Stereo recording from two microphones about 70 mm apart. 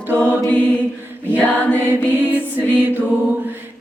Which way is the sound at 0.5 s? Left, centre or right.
Centre.